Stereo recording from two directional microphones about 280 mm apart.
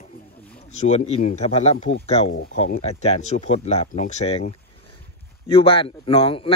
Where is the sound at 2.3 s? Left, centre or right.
Left.